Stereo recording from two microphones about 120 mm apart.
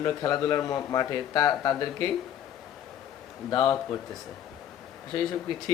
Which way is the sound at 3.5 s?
30° left (ahead or behind).